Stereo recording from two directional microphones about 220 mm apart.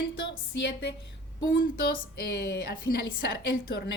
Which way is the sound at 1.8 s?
45° left (ahead or behind).